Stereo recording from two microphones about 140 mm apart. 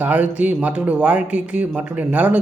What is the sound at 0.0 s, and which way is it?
Speech, 10° right (ahead or behind).